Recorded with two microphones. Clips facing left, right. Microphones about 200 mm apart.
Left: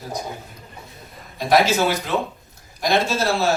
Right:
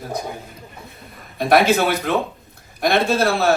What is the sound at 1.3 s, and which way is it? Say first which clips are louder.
A man's voice: right 2 dB; 55° right (ahead or behind).